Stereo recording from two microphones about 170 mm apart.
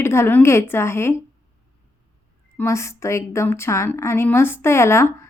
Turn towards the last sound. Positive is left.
turn(degrees=15)  # may be behind; listen again after turning